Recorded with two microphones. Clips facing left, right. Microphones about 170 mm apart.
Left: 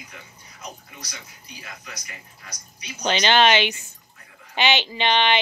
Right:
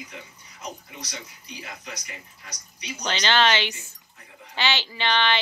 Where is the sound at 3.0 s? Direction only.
15° left (ahead or behind).